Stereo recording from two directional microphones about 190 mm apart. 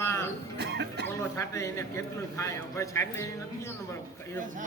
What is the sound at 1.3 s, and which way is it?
A man's voice, 15° left (ahead or behind).